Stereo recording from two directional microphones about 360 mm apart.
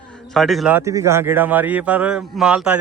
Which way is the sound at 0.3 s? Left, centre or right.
Centre.